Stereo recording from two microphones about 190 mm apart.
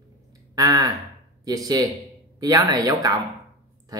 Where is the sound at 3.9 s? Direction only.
20° right (ahead or behind).